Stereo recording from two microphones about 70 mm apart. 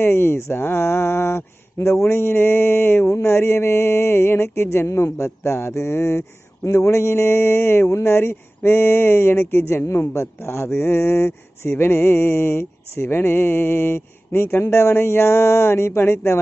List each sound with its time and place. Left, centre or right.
0.0 s speech: left